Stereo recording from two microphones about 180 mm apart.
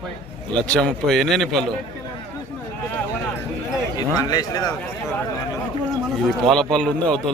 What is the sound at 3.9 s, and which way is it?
Speech, 20° left (ahead or behind).